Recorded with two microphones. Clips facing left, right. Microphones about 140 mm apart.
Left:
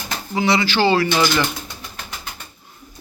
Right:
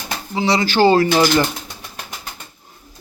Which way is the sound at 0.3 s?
35° right (ahead or behind).